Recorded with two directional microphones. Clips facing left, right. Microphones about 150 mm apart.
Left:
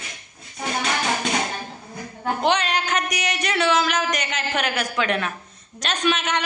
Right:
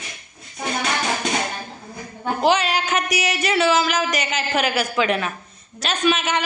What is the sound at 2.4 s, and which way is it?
A man's voice, 5° right (ahead or behind).